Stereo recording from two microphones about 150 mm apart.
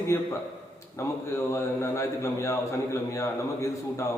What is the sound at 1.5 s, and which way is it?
A man's voice, 20° left (ahead or behind).